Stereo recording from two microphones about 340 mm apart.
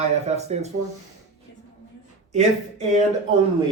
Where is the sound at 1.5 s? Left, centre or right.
Left.